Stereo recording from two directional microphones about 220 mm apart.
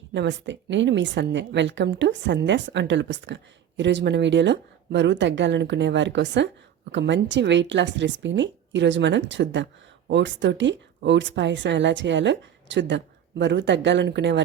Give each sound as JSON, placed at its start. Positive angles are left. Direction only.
{"t": 0.1, "sound": "a woman's voice", "side_deg": -55}